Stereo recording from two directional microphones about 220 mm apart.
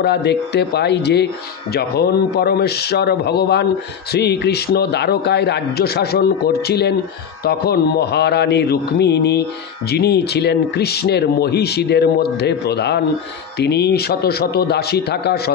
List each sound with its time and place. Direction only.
0.0 s speech: 50° left (ahead or behind)